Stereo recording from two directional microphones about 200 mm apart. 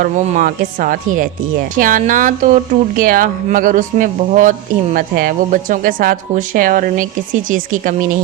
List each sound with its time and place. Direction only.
0.0 s speech: 45° right (ahead or behind)